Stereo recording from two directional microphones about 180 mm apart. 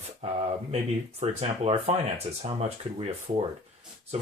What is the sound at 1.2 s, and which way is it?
Speech, 35° right (ahead or behind).